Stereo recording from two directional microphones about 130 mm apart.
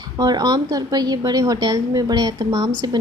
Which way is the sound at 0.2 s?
30° right (ahead or behind).